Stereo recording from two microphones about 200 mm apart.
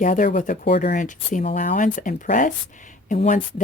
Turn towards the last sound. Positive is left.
turn(degrees=40)  # may be behind; listen again after turning